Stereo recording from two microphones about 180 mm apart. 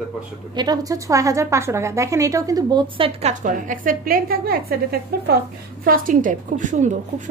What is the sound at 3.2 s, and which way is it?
A woman's voice, 40° right (ahead or behind).